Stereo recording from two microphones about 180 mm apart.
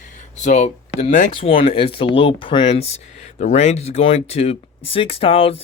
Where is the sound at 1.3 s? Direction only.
30° left (ahead or behind).